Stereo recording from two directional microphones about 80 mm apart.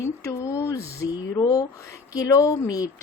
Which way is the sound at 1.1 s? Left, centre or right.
Left.